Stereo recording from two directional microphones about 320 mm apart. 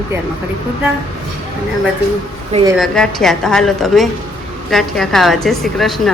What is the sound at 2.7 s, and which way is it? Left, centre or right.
A woman's voice, centre.